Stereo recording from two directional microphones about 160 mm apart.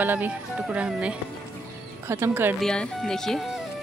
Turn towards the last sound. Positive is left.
turn(degrees=0)  # may be behind; listen again after turning